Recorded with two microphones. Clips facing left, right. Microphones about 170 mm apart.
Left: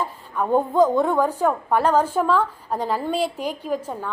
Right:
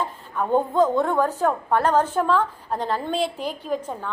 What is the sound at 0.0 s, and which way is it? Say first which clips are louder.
A woman's voice: left 1 dB; 5° left (ahead or behind).